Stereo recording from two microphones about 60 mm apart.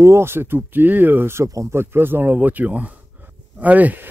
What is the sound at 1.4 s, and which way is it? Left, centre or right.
Speech, right.